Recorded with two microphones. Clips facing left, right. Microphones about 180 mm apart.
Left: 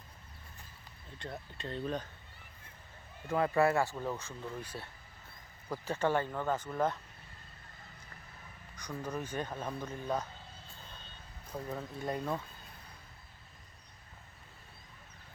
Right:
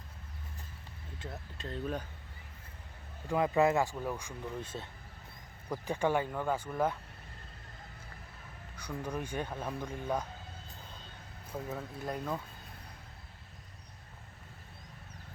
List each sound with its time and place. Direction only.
1.2 s speech: centre (ahead or behind)
3.2 s speech: 15° right (ahead or behind)
8.7 s speech: 10° right (ahead or behind)
11.7 s speech: centre (ahead or behind)